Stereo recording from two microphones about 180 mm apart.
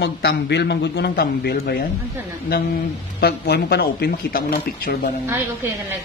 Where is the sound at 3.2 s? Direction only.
65° left (ahead or behind).